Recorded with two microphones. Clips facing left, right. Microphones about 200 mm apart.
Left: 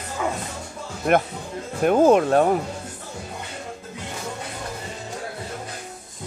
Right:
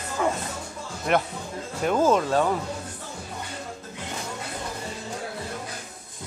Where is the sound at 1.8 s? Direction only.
55° left (ahead or behind).